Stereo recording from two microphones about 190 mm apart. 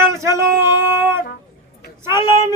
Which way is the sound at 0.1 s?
15° right (ahead or behind).